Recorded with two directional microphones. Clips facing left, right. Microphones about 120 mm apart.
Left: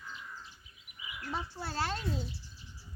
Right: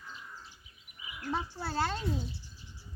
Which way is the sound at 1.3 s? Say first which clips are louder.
Right 4 dB; 20° right (ahead or behind).